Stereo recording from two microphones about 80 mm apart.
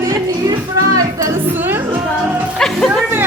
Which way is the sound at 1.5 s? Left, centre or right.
Right.